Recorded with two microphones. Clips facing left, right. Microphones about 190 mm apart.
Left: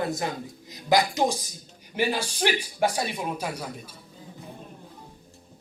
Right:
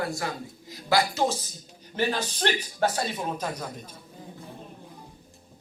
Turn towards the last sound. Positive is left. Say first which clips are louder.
# even
turn(degrees=10)  # may be behind; listen again after turning